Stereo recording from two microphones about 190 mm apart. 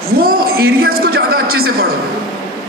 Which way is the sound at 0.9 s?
55° right (ahead or behind).